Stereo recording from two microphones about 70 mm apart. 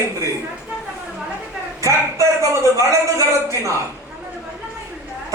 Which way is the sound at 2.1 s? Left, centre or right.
Right.